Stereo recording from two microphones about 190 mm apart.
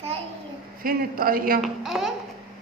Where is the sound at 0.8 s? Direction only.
50° right (ahead or behind).